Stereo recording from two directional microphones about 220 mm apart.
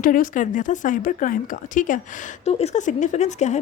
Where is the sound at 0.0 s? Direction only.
40° left (ahead or behind).